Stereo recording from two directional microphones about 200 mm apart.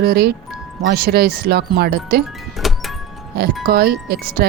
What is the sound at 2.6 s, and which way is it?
Music, centre (ahead or behind).